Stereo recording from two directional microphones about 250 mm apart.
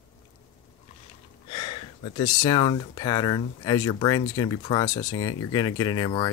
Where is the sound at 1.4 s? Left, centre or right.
Left.